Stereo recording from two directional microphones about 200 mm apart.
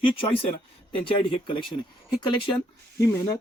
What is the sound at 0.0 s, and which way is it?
A man's voice, 25° left (ahead or behind).